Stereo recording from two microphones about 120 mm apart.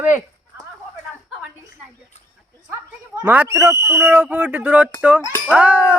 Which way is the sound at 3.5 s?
25° right (ahead or behind).